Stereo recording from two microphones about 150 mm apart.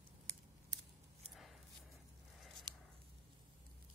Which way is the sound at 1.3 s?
Centre (ahead or behind).